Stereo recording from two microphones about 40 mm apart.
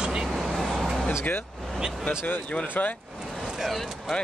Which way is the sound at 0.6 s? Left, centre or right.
Centre.